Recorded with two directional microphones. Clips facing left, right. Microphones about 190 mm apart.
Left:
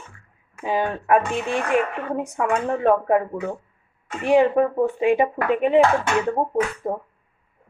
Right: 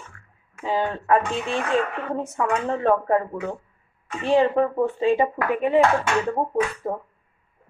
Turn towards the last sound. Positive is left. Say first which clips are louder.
# left 2 dB
turn(degrees=15)  # may be behind; listen again after turning